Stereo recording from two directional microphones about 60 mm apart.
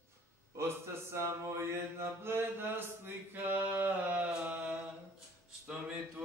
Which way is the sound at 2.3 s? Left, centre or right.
Right.